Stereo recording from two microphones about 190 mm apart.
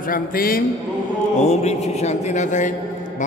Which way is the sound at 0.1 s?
50° left (ahead or behind).